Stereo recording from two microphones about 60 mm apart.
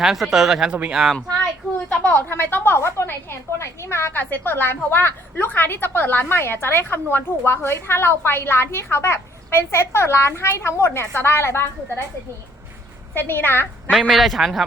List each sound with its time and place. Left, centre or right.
0.0 s speech: centre
2.0 s a woman's voice: left
13.1 s a woman's voice: left
14.1 s a man's voice: centre